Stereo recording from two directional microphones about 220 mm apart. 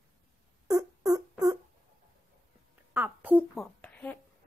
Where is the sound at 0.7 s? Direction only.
15° right (ahead or behind).